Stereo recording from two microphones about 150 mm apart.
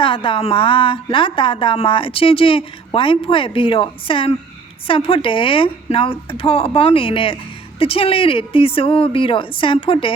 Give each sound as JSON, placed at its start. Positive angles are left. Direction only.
{"t": 0.0, "sound": "a woman's voice", "side_deg": 35}